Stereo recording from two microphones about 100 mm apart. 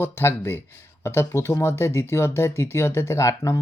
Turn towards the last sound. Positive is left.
turn(degrees=30)  # may be behind; listen again after turning